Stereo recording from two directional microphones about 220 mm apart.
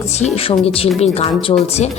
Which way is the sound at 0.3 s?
25° left (ahead or behind).